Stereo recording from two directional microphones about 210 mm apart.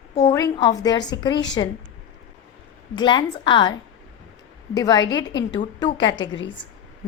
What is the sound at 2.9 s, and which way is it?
Speech, 20° left (ahead or behind).